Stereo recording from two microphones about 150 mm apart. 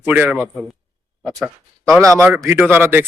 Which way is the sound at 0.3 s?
5° left (ahead or behind).